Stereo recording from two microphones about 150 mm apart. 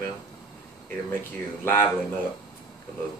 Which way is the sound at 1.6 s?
15° left (ahead or behind).